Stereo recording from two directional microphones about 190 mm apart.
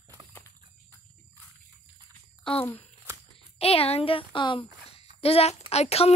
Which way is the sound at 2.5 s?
30° left (ahead or behind).